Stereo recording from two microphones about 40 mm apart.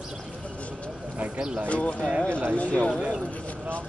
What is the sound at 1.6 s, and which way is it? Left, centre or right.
Speech, left.